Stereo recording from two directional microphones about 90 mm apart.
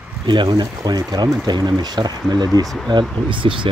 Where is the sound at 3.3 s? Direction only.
65° right (ahead or behind).